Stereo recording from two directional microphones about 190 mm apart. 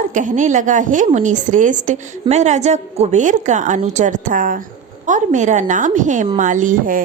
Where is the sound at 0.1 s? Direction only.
40° right (ahead or behind).